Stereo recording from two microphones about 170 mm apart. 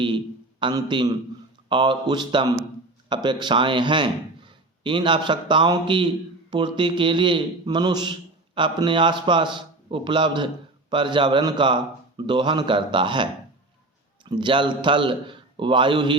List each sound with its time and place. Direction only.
0.6 s a man's voice: 25° right (ahead or behind)
14.3 s a man's voice: 30° right (ahead or behind)